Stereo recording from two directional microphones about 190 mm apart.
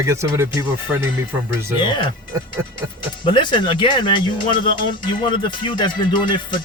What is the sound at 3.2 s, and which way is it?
Speech, 25° left (ahead or behind).